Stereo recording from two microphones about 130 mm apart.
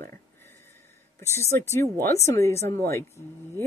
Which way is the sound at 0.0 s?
20° left (ahead or behind).